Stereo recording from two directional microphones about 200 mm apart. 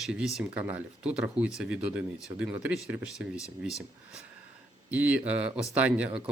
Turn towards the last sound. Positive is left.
turn(degrees=-5)  # may be behind; listen again after turning